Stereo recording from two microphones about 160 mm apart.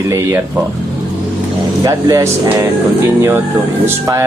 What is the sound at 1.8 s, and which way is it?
Speech, 20° right (ahead or behind).